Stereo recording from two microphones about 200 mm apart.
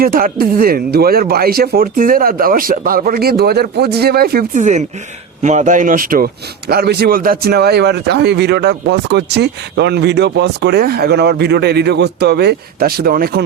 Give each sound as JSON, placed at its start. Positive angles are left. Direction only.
{"t": 0.0, "sound": "speech", "side_deg": -45}